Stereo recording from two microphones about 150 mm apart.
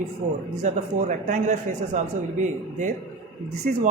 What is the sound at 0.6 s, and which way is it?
A man's voice, 55° right (ahead or behind).